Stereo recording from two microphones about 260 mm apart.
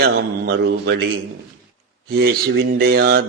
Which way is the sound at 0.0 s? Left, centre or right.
Right.